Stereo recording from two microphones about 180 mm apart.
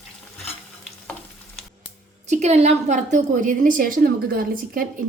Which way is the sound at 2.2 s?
40° right (ahead or behind).